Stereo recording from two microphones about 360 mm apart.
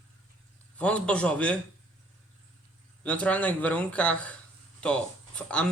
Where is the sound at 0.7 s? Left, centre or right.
Centre.